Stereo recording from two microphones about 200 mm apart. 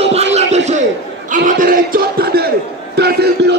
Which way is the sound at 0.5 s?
35° right (ahead or behind).